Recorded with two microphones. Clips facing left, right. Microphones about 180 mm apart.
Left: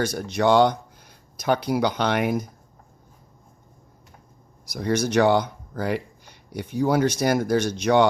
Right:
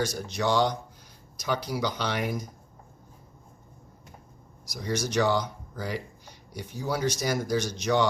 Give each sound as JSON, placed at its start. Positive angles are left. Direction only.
{"t": 0.0, "sound": "speech", "side_deg": 55}
{"t": 4.6, "sound": "speech", "side_deg": 60}